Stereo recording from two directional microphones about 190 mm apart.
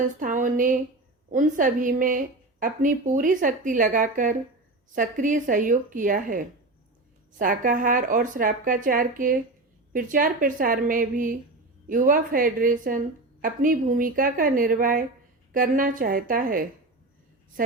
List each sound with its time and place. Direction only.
0.2 s a woman's voice: 45° right (ahead or behind)